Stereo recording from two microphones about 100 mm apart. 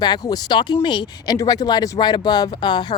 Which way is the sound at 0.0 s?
40° left (ahead or behind).